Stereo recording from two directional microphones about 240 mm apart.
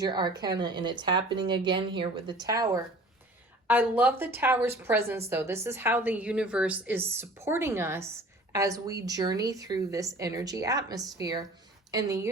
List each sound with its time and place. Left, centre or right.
0.0 s a woman's voice: centre